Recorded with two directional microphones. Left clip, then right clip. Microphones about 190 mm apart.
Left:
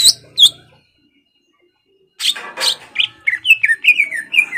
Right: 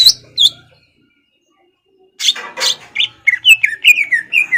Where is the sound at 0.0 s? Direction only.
20° left (ahead or behind).